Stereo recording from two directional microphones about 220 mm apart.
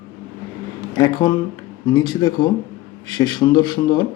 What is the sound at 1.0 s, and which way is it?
Speech, 20° left (ahead or behind).